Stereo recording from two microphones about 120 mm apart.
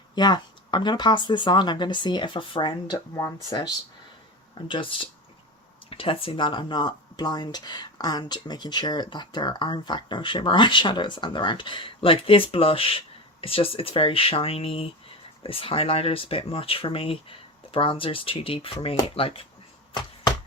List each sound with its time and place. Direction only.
0.2 s speech: 35° left (ahead or behind)
4.5 s speech: 45° left (ahead or behind)
19.9 s a sound: 35° left (ahead or behind)